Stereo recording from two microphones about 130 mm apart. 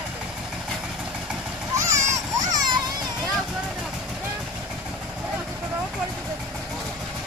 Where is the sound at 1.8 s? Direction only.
25° right (ahead or behind).